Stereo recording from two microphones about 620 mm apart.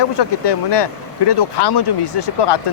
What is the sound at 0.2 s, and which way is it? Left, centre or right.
Speech, left.